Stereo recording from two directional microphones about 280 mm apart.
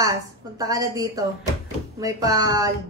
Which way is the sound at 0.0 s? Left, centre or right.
Centre.